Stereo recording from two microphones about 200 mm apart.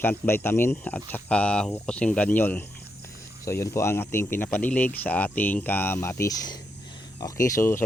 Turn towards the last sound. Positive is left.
turn(degrees=15)  # may be behind; listen again after turning